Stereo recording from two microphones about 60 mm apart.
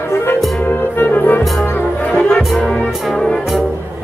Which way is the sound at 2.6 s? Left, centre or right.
Centre.